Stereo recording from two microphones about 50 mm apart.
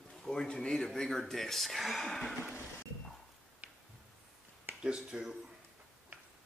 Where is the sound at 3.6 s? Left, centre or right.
Right.